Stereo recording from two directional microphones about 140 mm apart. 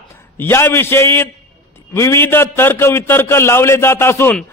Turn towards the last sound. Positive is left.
turn(degrees=15)  # may be behind; listen again after turning